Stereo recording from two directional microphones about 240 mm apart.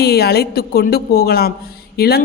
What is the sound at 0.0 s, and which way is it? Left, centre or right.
Speech, left.